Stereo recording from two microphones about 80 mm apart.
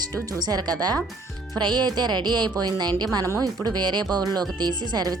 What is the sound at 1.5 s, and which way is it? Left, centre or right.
Speech, right.